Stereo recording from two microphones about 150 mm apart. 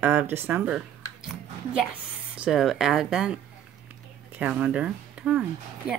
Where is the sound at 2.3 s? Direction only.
5° right (ahead or behind).